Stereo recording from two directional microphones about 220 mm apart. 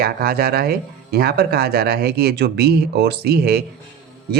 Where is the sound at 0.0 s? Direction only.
45° right (ahead or behind).